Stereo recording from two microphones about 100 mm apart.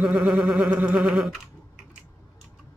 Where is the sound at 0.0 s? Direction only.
5° right (ahead or behind).